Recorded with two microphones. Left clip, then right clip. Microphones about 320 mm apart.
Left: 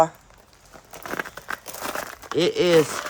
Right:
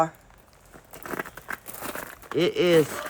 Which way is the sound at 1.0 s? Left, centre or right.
Centre.